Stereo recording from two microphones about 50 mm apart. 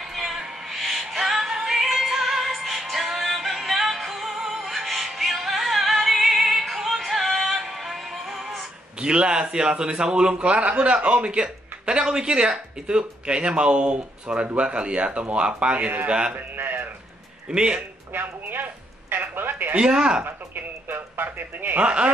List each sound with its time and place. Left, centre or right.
0.1 s a sound: centre
0.7 s music: centre
9.0 s a man's voice: centre
16.3 s a sound: right
17.5 s speech: centre
18.1 s a sound: right
19.7 s speech: centre
20.2 s speech: right
21.8 s a man's voice: right